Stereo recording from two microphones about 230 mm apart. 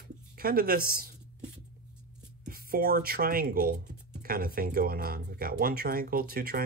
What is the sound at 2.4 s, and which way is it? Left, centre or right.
Speech, right.